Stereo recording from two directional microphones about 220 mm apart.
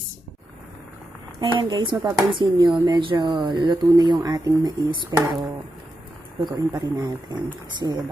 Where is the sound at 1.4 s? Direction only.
20° right (ahead or behind).